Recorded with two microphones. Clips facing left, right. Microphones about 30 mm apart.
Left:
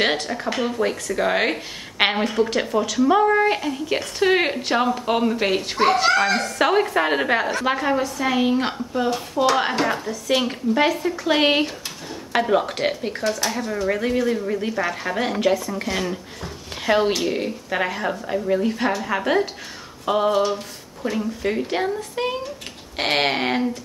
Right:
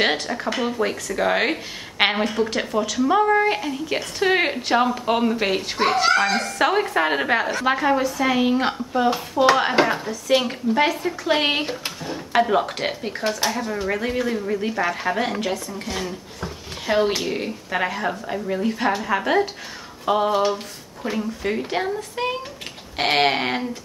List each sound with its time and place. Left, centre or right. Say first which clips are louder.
0.0 s speech: even; centre
20.1 s a sound: even; centre
21.2 s speech: left 1 dB; centre